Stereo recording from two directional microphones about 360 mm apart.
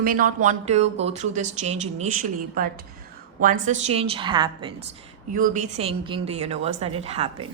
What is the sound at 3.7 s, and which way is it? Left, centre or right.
Speech, centre.